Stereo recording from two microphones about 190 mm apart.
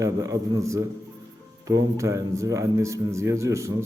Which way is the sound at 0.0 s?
15° right (ahead or behind).